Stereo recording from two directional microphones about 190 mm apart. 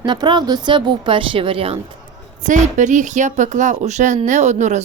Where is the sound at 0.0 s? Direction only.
25° right (ahead or behind).